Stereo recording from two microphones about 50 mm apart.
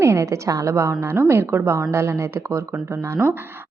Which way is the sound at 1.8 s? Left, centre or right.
Right.